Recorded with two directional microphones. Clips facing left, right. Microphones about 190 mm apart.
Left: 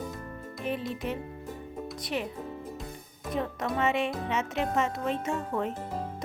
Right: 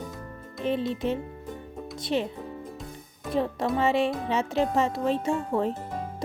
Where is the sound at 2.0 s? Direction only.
25° right (ahead or behind).